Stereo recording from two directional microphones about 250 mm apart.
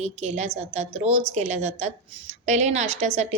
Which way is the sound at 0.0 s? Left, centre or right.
Right.